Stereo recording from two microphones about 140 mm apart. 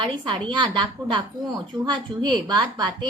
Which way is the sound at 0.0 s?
30° right (ahead or behind).